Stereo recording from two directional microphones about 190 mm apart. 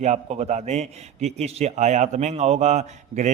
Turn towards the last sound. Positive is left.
turn(degrees=-35)  # may be behind; listen again after turning